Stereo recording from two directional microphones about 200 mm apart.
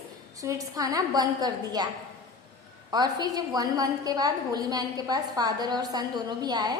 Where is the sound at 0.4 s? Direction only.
15° right (ahead or behind).